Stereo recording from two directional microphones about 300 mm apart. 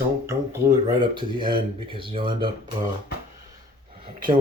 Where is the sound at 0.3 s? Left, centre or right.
Centre.